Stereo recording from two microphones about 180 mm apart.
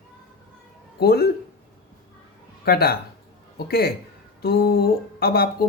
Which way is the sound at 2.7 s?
60° left (ahead or behind).